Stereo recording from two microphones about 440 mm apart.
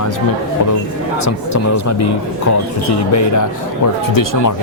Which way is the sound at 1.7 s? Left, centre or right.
Left.